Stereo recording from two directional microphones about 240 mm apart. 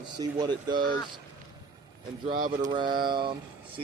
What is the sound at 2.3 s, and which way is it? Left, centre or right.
Mantra, right.